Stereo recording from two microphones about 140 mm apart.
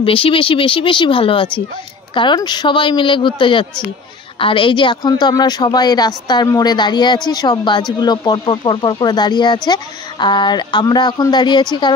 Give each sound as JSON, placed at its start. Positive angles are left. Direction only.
{"t": 0.0, "sound": "speech", "side_deg": 40}